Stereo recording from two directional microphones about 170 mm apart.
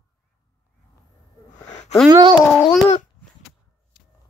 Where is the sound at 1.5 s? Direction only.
45° left (ahead or behind).